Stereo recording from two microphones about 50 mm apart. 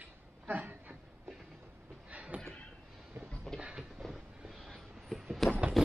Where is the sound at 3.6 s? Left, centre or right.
Centre.